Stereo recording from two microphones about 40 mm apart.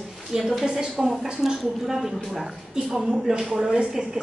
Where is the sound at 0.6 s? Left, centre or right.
Right.